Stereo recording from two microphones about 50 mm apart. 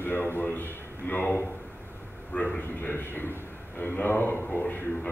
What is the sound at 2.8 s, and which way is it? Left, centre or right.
A man's voice, left.